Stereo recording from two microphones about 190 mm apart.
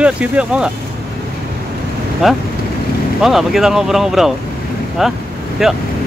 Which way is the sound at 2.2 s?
Centre (ahead or behind).